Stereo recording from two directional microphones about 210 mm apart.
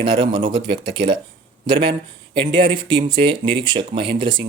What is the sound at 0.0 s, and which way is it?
Speech, 25° right (ahead or behind).